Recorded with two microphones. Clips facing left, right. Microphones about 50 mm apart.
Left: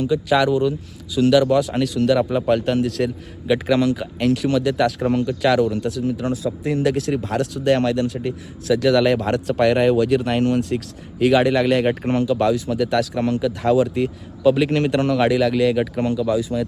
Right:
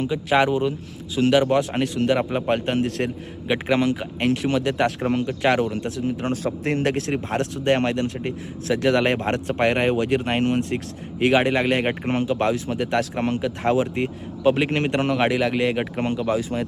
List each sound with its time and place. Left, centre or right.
0.0 s speech: right